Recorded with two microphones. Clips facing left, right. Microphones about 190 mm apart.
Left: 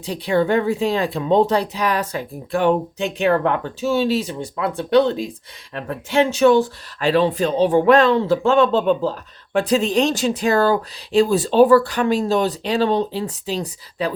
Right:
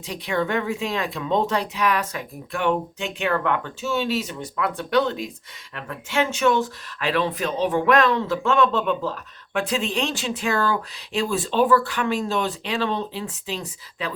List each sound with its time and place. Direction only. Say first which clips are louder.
0.0 s speech: left 6 dB; 35° left (ahead or behind)